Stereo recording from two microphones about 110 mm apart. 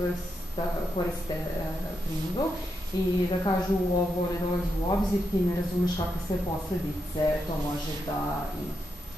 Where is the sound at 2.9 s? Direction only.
40° left (ahead or behind).